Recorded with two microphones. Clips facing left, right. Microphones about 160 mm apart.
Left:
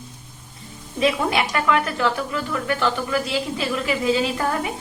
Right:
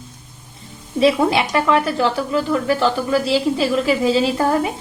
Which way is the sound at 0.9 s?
30° right (ahead or behind).